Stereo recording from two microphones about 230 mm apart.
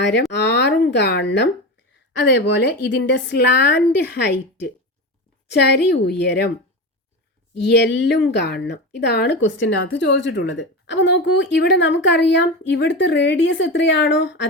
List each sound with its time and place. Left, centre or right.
0.3 s speech: left
7.6 s speech: left